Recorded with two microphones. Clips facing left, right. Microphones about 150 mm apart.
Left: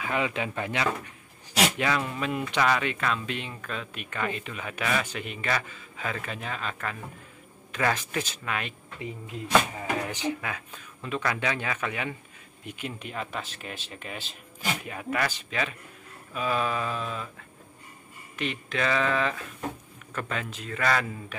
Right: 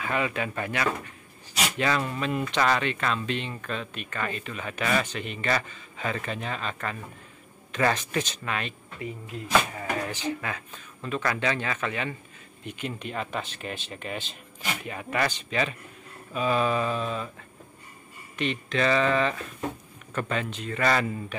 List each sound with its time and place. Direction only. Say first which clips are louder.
0.0 s speech: even; 15° left (ahead or behind)
18.3 s speech: right 3 dB; 5° left (ahead or behind)